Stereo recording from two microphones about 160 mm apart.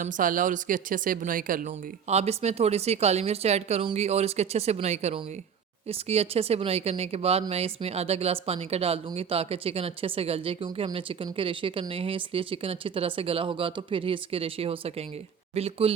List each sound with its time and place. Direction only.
0.0 s speech: 55° right (ahead or behind); by 15.9 s 40° right (ahead or behind)